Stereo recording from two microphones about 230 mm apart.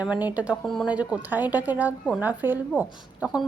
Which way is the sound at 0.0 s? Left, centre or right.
Centre.